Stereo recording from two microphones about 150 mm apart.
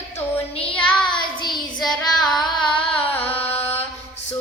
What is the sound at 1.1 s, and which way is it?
Child singing, 30° left (ahead or behind).